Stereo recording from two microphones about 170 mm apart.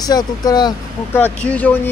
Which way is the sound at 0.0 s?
25° left (ahead or behind).